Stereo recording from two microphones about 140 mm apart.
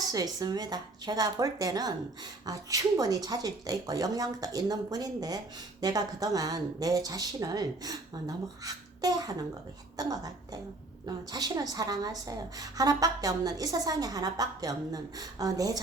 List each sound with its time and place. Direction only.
0.1 s a woman's voice: 25° right (ahead or behind)